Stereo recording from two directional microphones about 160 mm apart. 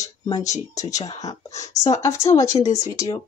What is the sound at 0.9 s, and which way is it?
Speech, 20° left (ahead or behind).